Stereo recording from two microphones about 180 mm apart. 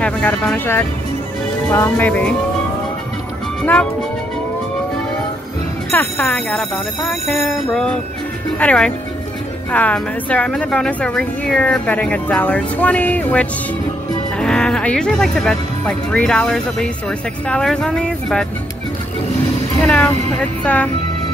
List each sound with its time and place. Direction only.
0.0 s a woman's voice: 10° left (ahead or behind)
5.9 s a woman's voice: 5° left (ahead or behind)
19.8 s a woman's voice: 5° left (ahead or behind)